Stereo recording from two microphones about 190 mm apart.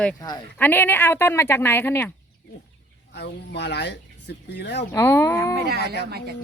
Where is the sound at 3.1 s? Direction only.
65° left (ahead or behind).